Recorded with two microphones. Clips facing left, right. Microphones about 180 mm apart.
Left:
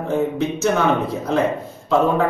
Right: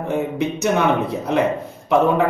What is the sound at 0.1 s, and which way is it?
Speech, 15° right (ahead or behind).